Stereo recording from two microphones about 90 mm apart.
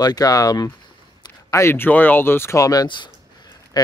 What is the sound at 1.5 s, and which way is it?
Speech, 30° left (ahead or behind).